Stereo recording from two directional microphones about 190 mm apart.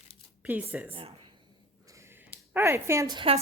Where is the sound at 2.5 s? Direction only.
15° right (ahead or behind).